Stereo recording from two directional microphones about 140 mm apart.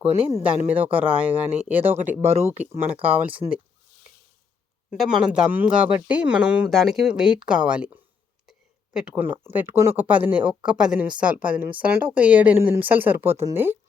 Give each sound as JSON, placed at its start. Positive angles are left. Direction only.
{"t": 0.0, "sound": "speech", "side_deg": -45}
{"t": 0.4, "sound": "speech", "side_deg": -10}
{"t": 4.9, "sound": "speech", "side_deg": -5}
{"t": 8.4, "sound": "a sound", "side_deg": -5}
{"t": 9.4, "sound": "speech", "side_deg": -15}